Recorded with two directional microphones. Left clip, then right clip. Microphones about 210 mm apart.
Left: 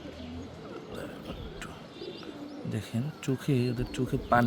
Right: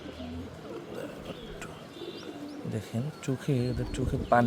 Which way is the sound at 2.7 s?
Centre (ahead or behind).